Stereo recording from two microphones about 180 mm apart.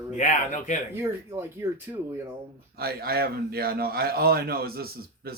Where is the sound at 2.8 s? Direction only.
60° right (ahead or behind).